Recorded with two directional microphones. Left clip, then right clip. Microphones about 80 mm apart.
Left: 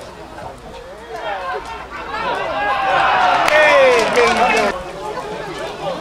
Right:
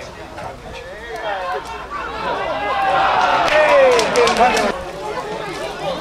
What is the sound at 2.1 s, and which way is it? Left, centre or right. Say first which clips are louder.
Run: left 3 dB; left.